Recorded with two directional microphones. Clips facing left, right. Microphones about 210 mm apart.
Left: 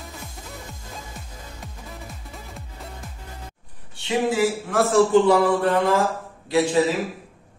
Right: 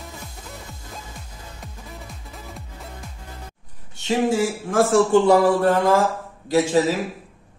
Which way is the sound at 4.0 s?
45° right (ahead or behind).